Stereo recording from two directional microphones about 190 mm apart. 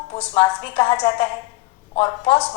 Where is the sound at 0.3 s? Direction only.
30° left (ahead or behind).